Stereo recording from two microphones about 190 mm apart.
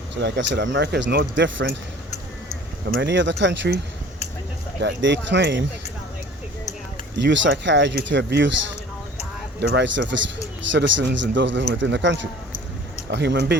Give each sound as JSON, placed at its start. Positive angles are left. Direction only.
{"t": 0.2, "sound": "a man's voice", "side_deg": -70}
{"t": 3.0, "sound": "a man's voice", "side_deg": -70}
{"t": 4.8, "sound": "a man's voice", "side_deg": -70}
{"t": 7.2, "sound": "a man's voice", "side_deg": -70}
{"t": 9.6, "sound": "a man's voice", "side_deg": -65}